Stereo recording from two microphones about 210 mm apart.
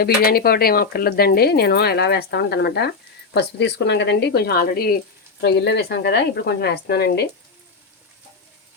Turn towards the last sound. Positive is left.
turn(degrees=50)  # may be behind; listen again after turning